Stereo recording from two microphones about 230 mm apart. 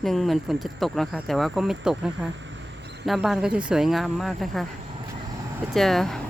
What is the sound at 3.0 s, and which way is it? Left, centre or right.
Speech, centre.